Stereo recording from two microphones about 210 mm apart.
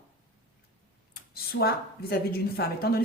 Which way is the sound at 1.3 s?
50° left (ahead or behind).